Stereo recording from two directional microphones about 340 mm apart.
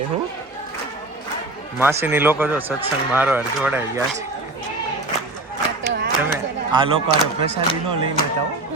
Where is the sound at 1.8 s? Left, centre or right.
Centre.